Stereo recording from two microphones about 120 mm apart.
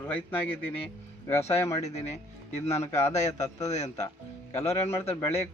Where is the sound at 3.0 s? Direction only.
70° left (ahead or behind).